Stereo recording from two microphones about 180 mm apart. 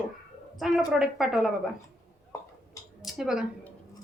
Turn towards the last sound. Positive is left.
turn(degrees=-5)  # may be behind; listen again after turning